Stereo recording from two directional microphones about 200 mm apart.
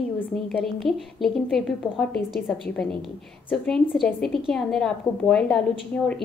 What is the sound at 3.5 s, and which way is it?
A woman's voice, centre (ahead or behind).